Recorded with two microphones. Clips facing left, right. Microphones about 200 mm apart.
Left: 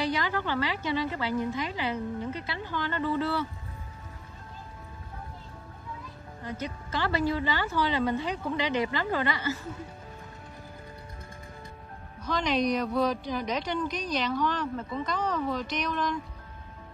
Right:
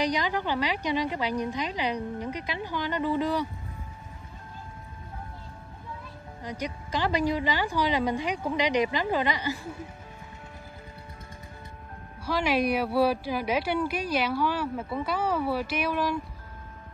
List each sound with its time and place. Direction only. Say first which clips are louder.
0.0 s a woman's voice: right 2 dB; 15° right (ahead or behind)
6.4 s a woman's voice: right 1 dB; 15° right (ahead or behind)
12.3 s a woman's voice: right 1 dB; 10° right (ahead or behind)